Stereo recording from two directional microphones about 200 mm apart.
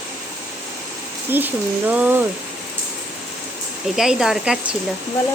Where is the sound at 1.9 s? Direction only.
10° right (ahead or behind).